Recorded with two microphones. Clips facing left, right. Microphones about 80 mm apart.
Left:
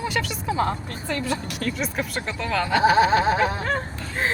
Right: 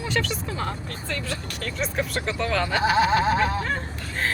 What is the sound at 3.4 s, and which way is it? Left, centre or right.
Speech, centre.